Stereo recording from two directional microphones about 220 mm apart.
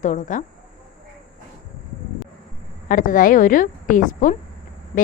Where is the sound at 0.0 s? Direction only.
35° left (ahead or behind).